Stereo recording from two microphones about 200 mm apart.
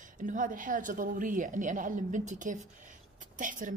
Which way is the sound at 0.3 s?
40° right (ahead or behind).